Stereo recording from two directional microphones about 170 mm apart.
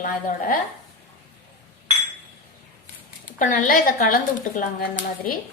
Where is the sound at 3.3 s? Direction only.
50° left (ahead or behind).